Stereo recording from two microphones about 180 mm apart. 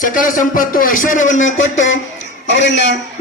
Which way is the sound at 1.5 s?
90° left.